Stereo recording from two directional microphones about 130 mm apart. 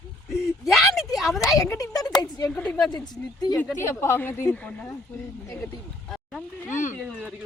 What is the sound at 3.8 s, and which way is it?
Speech, 20° left (ahead or behind).